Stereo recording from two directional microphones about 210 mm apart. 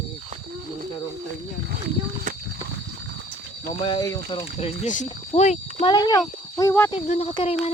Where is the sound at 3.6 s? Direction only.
20° left (ahead or behind).